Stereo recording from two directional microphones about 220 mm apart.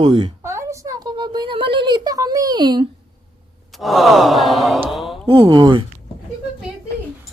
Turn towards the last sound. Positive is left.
turn(degrees=-20)  # may be behind; listen again after turning